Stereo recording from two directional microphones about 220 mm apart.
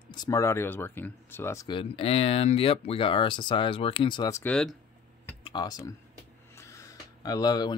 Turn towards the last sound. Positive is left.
turn(degrees=15)  # may be behind; listen again after turning